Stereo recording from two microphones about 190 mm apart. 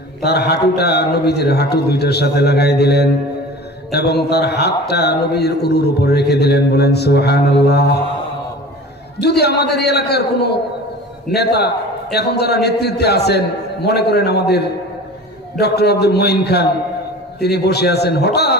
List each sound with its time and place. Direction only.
0.2 s a man's voice: 60° left (ahead or behind)
9.2 s a man's voice: 60° left (ahead or behind)